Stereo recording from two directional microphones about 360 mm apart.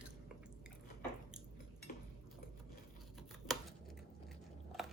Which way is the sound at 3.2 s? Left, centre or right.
Centre.